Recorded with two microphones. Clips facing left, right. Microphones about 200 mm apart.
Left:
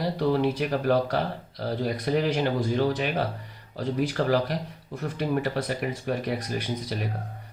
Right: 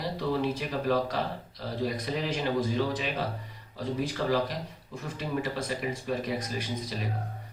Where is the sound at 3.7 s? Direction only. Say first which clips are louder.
Left 5 dB; 70° left (ahead or behind).